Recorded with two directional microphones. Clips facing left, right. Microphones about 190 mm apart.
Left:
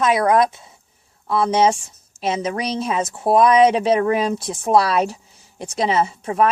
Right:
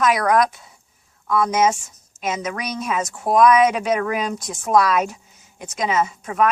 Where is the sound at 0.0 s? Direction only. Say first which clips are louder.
Left 2 dB; 25° left (ahead or behind).